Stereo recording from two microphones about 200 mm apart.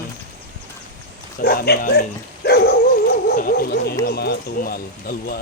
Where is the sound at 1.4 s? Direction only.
50° left (ahead or behind).